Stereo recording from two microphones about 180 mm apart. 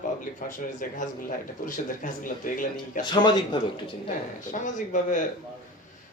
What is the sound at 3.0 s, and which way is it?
Speech, 25° left (ahead or behind).